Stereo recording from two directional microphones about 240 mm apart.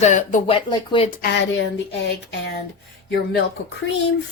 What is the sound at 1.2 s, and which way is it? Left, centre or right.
Speech, left.